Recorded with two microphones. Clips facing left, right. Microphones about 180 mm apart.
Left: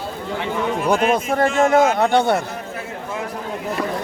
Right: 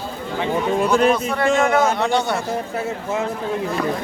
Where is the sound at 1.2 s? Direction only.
45° left (ahead or behind).